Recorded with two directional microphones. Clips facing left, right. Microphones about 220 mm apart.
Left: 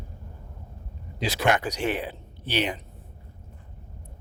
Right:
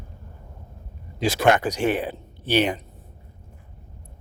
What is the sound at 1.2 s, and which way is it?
Speech, 45° right (ahead or behind).